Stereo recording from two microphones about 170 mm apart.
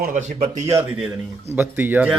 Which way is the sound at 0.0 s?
50° right (ahead or behind).